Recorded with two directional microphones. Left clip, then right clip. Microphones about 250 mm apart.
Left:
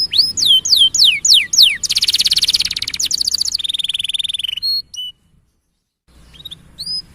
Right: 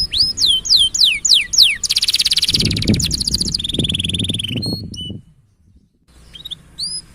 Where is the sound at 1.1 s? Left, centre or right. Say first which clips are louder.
Left 2 dB; centre.